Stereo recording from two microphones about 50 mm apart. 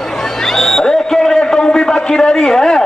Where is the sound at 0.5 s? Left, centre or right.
Centre.